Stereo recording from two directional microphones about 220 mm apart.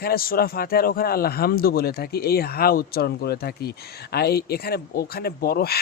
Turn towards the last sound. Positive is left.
turn(degrees=45)  # may be behind; listen again after turning